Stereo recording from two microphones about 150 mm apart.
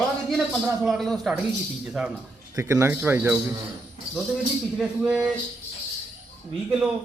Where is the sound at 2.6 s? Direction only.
20° right (ahead or behind).